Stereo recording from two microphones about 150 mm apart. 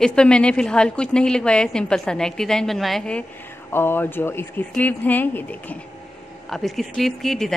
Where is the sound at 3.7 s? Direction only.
15° left (ahead or behind).